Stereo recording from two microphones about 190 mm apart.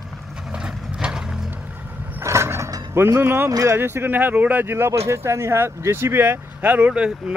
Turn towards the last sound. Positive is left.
turn(degrees=-5)  # may be behind; listen again after turning